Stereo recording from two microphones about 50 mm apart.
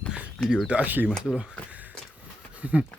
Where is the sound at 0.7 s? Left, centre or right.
Right.